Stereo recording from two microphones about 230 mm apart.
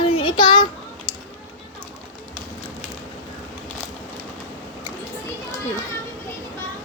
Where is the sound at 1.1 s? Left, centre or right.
Centre.